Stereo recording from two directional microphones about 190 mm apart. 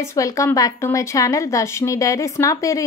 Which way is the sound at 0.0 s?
15° left (ahead or behind).